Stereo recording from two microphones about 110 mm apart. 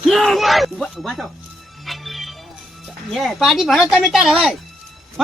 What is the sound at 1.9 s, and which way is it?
Music, centre (ahead or behind).